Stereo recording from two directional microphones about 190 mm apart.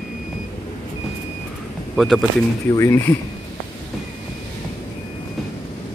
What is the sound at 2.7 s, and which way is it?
Speech, 15° left (ahead or behind).